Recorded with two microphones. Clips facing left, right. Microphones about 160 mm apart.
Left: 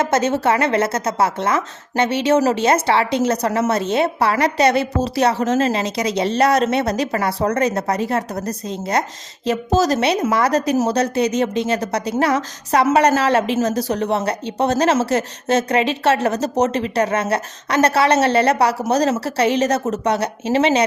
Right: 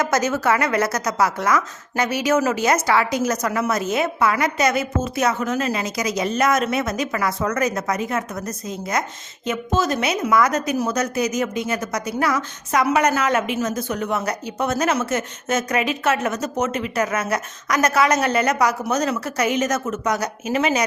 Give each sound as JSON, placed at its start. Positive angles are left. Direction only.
{"t": 0.0, "sound": "speech", "side_deg": 25}